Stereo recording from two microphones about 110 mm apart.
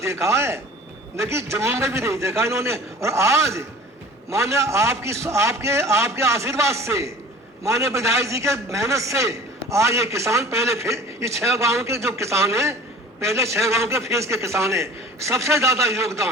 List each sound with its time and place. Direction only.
0.0 s a man's voice: 25° right (ahead or behind)